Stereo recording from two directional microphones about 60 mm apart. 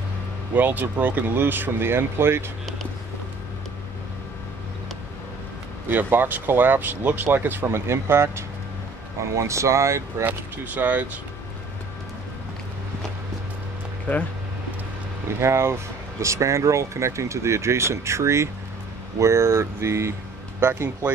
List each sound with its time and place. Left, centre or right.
0.6 s speech: right
5.9 s speech: right
7.6 s speech: right
10.2 s speech: right
15.2 s speech: right